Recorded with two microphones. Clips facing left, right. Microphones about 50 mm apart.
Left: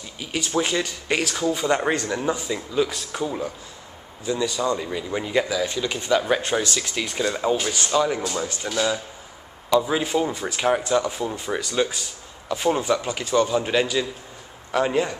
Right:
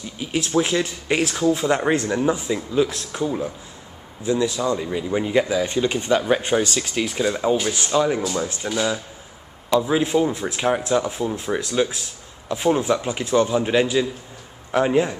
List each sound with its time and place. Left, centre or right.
0.2 s speech: centre
5.5 s speech: right
6.1 s speech: centre